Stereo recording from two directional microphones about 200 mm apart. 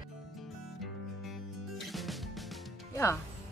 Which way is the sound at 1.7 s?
Centre (ahead or behind).